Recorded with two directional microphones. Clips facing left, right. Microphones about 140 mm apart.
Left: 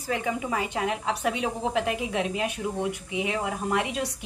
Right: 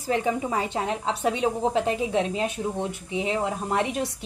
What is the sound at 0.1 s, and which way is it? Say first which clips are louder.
A woman's voice: right 3 dB; 30° right (ahead or behind).